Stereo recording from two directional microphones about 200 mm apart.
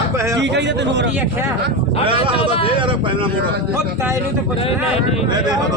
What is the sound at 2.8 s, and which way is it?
Speech, 25° right (ahead or behind).